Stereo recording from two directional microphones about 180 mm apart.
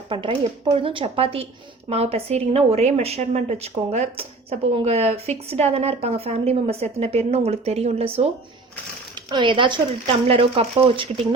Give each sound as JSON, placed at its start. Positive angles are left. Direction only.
{"t": 0.1, "sound": "a woman's voice", "side_deg": -25}